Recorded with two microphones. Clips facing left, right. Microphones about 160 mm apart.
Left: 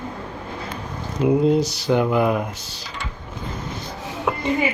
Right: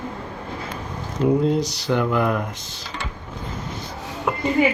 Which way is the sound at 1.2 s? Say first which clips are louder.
Left 2 dB; 10° left (ahead or behind).